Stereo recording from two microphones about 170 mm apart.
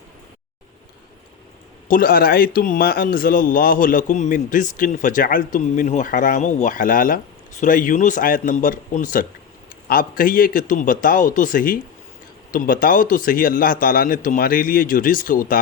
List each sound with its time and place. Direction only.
1.9 s a man's voice: 55° left (ahead or behind)